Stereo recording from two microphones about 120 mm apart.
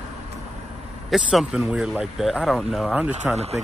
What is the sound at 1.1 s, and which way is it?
Speech, 5° right (ahead or behind).